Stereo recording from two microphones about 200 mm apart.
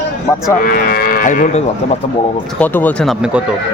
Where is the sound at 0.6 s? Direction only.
45° left (ahead or behind).